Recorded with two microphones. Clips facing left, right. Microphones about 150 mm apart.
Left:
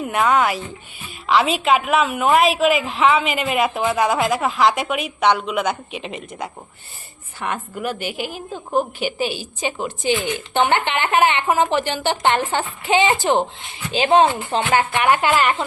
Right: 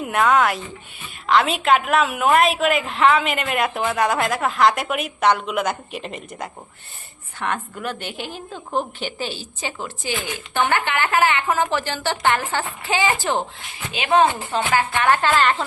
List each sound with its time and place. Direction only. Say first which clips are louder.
0.0 s a woman's voice: even; centre (ahead or behind)